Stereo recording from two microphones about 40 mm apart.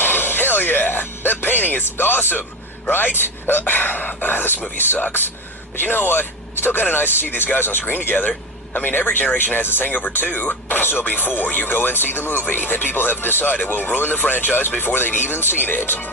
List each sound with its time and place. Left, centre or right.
0.0 s speech: left
9.2 s speech: left
9.6 s speech: left